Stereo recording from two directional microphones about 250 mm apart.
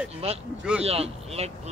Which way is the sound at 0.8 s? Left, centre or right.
Right.